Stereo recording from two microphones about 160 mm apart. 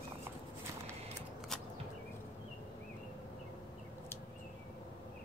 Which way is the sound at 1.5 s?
5° left (ahead or behind).